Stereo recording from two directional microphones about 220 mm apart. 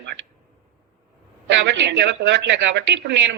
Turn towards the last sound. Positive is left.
turn(degrees=-50)  # may be behind; listen again after turning